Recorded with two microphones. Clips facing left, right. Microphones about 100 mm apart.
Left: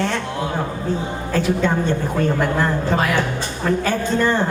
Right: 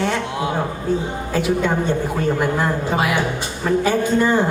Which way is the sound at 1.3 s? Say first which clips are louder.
Even; 15° right (ahead or behind).